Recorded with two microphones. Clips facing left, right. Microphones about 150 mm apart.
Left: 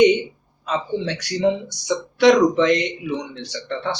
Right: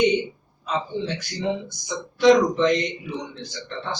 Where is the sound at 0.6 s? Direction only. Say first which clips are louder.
Left 3 dB; 80° left.